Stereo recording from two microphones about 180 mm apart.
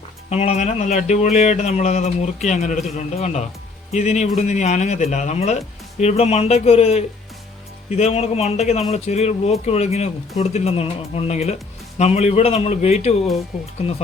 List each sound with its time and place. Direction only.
0.3 s speech: 35° left (ahead or behind)